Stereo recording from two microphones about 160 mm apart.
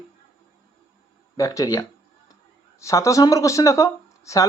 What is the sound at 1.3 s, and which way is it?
Speech, 20° left (ahead or behind).